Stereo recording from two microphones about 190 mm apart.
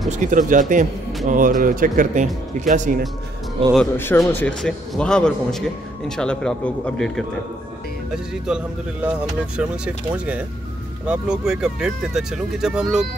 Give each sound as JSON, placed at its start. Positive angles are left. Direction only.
{"t": 0.1, "sound": "speech", "side_deg": -40}
{"t": 3.7, "sound": "a man's voice", "side_deg": 10}